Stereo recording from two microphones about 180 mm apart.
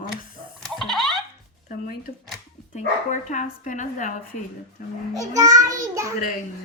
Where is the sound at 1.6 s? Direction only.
45° left (ahead or behind).